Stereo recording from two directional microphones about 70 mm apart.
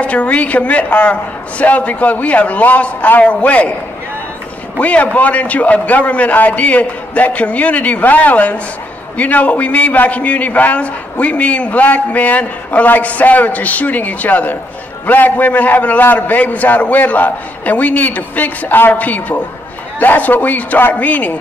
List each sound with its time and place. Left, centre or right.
0.0 s a man's voice: centre
4.7 s a man's voice: left